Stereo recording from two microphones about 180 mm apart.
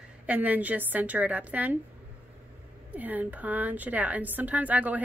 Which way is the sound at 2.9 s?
10° right (ahead or behind).